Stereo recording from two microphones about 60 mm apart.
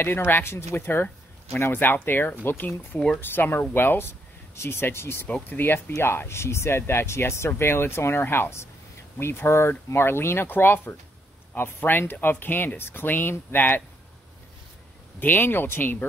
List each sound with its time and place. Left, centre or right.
0.0 s speech: left
5.9 s speech: left
15.1 s speech: left